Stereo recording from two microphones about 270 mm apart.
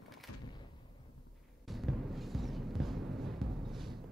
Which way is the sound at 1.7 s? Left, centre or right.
Centre.